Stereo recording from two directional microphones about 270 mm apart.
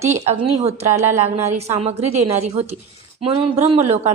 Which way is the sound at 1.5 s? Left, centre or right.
Right.